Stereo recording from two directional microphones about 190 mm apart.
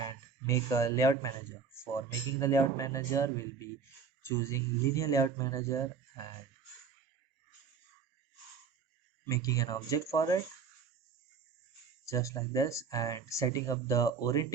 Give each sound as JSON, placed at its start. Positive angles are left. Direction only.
{"t": 0.0, "sound": "speech", "side_deg": 15}
{"t": 9.2, "sound": "speech", "side_deg": 20}
{"t": 12.0, "sound": "speech", "side_deg": 15}